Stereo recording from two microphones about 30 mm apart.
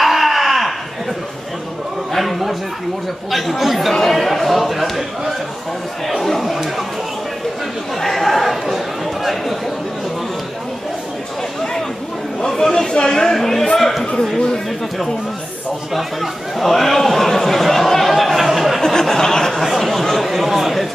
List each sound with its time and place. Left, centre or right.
0.0 s a sound: centre
2.1 s a man's voice: centre
6.0 s speech: centre
8.0 s speech: centre
12.4 s speech: centre
15.9 s speech: centre
18.1 s speech: centre
18.8 s speech: centre
19.6 s speech: centre
19.9 s speech: centre
20.2 s speech: centre